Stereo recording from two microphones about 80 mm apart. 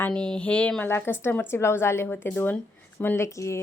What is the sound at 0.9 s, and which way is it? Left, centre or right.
A woman's voice, left.